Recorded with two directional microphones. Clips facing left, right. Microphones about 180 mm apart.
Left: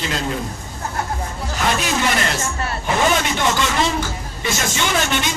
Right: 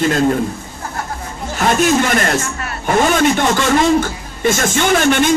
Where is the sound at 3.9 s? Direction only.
50° right (ahead or behind).